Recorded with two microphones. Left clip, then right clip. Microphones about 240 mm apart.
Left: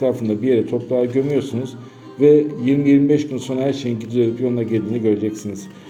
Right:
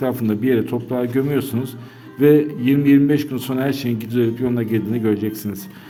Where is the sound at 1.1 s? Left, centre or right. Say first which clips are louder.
Left 1 dB; right.